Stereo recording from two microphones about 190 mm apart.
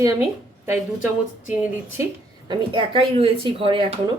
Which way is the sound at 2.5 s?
25° right (ahead or behind).